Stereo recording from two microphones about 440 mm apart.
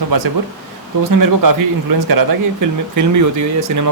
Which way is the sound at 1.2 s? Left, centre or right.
Right.